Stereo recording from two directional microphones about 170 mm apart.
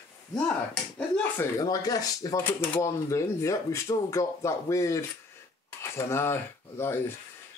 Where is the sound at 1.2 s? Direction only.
20° left (ahead or behind).